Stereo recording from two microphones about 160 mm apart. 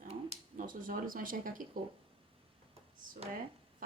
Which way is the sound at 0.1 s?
50° right (ahead or behind).